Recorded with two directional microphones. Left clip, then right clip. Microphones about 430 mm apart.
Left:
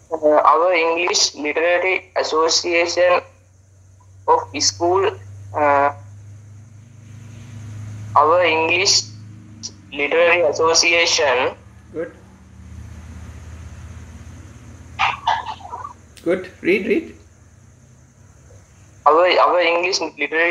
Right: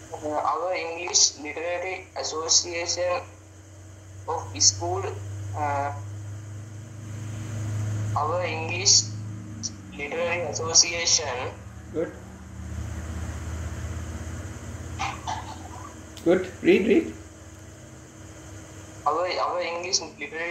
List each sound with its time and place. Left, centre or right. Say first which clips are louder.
0.3 s speech: left 13 dB; centre
4.3 s speech: left 8 dB; centre
8.1 s speech: left 13 dB; centre
9.8 s speech: left 13 dB; centre
15.0 s a sound: left 13 dB; centre
16.3 s speech: left 2 dB; centre
19.0 s speech: left 12 dB; centre